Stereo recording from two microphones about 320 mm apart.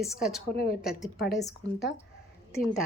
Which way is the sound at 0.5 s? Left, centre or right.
Left.